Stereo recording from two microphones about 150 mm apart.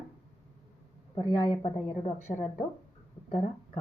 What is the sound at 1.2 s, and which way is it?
Speech, 25° left (ahead or behind).